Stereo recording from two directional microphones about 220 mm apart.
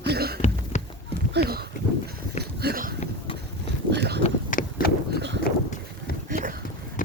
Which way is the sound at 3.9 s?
50° right (ahead or behind).